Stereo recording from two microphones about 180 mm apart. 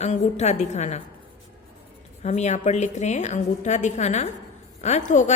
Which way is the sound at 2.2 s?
40° left (ahead or behind).